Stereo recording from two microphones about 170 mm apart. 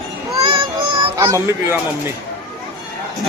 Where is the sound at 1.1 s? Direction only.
20° right (ahead or behind).